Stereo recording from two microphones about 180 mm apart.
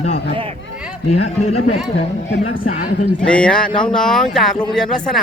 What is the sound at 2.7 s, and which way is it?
Speech, 45° left (ahead or behind).